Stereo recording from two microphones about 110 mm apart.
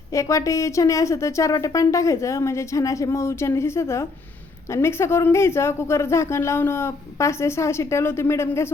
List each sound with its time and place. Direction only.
0.1 s speech: 30° left (ahead or behind)